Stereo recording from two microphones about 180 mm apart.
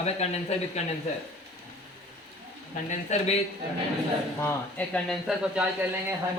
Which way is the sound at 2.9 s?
40° left (ahead or behind).